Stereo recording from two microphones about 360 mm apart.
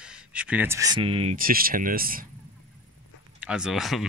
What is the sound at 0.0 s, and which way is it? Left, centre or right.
Speech, centre.